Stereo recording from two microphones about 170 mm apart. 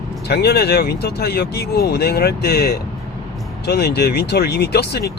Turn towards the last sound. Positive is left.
turn(degrees=75)  # may be behind; listen again after turning